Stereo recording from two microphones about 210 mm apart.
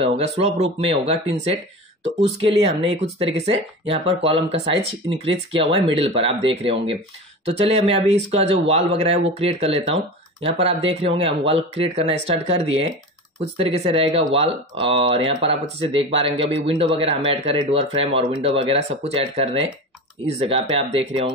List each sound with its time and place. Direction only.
0.0 s speech: 30° right (ahead or behind)
2.6 s speech: 25° right (ahead or behind)